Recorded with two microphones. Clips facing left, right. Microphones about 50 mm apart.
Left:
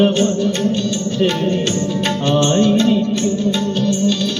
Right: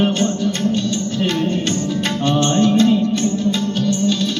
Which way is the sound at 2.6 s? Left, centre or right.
Left.